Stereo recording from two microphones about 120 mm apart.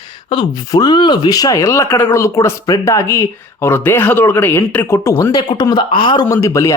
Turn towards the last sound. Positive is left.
turn(degrees=25)  # may be behind; listen again after turning